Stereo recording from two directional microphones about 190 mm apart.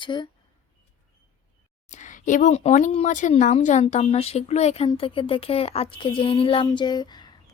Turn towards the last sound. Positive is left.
turn(degrees=20)  # may be behind; listen again after turning